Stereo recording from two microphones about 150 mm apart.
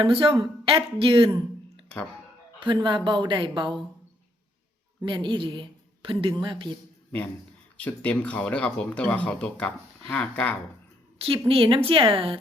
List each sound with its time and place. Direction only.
0.0 s a woman's voice: 40° right (ahead or behind)
2.6 s a woman's voice: 30° right (ahead or behind)
5.0 s a woman's voice: 30° right (ahead or behind)
7.8 s speech: 10° left (ahead or behind)
11.2 s a woman's voice: 40° right (ahead or behind)